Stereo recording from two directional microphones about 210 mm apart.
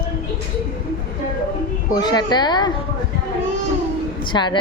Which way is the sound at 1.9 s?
20° left (ahead or behind).